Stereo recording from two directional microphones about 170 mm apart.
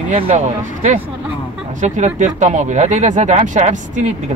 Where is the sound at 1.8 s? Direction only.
45° right (ahead or behind).